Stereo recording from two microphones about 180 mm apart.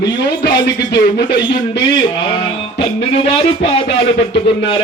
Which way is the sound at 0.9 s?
65° left (ahead or behind).